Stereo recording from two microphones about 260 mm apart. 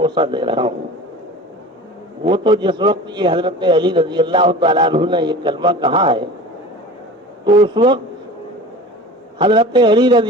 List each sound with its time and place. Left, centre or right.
0.0 s a man's voice: centre
2.2 s a man's voice: centre
7.4 s a man's voice: centre
9.4 s a man's voice: centre